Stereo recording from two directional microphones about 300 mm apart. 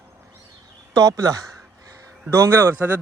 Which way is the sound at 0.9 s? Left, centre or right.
Centre.